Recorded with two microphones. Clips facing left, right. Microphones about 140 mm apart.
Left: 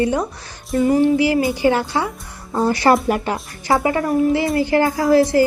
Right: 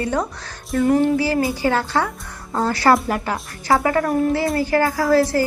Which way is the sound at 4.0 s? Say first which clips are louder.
Left 1 dB; centre (ahead or behind).